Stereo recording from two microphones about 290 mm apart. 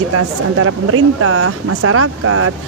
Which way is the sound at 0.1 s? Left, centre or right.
Right.